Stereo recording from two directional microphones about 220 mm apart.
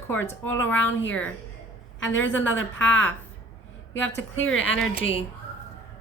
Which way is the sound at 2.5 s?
60° left (ahead or behind).